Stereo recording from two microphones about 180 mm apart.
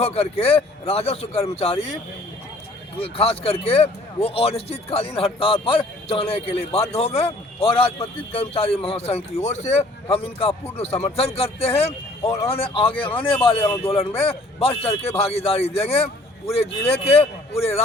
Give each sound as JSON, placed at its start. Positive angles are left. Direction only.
{"t": 0.0, "sound": "a man's voice", "side_deg": 35}
{"t": 3.0, "sound": "a man's voice", "side_deg": 30}